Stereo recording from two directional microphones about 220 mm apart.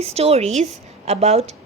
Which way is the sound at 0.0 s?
30° right (ahead or behind).